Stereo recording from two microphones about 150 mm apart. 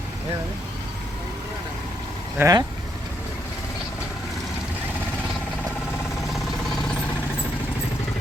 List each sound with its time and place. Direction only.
2.4 s speech: 25° right (ahead or behind)